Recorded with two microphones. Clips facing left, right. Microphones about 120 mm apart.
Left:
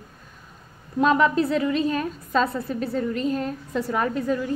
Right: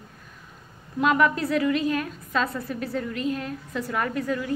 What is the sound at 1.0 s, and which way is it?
A woman's voice, 30° left (ahead or behind).